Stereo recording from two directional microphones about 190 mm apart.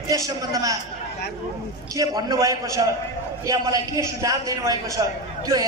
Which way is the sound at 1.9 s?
20° right (ahead or behind).